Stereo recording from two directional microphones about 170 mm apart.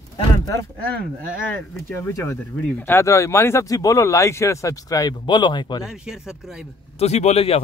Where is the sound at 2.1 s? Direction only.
15° left (ahead or behind).